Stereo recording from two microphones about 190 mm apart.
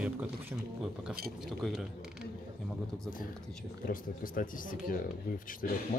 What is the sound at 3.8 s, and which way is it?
Speech, 45° left (ahead or behind).